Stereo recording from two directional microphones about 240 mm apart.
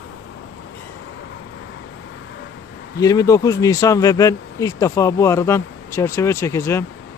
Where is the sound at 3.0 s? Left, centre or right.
Centre.